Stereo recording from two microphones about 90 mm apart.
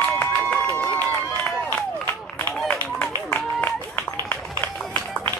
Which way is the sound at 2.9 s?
20° left (ahead or behind).